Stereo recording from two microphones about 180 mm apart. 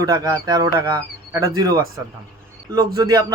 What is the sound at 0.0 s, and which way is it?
A man's voice, 20° right (ahead or behind).